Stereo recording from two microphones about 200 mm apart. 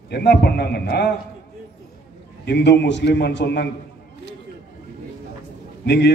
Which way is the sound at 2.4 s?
60° left (ahead or behind).